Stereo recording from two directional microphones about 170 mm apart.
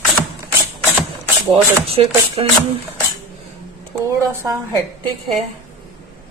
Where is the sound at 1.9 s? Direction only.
35° right (ahead or behind).